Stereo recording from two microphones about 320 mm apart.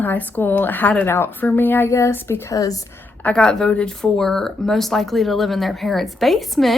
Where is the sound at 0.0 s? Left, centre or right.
Centre.